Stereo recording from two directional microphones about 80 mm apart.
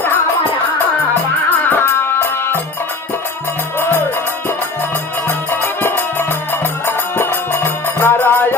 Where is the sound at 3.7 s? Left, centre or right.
Left.